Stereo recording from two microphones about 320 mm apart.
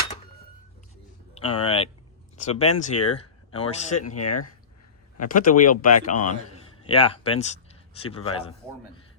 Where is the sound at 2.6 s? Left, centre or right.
Left.